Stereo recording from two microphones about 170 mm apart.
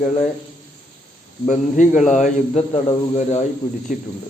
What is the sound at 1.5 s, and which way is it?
Speech, 45° left (ahead or behind).